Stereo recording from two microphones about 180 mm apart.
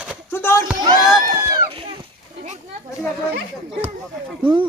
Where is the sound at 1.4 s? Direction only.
20° right (ahead or behind).